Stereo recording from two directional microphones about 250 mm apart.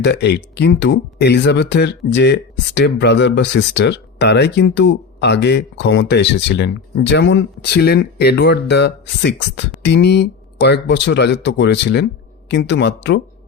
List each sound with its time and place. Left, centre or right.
0.0 s speech: left